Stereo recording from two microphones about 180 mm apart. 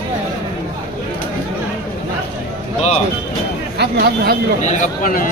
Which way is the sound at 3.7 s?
65° right (ahead or behind).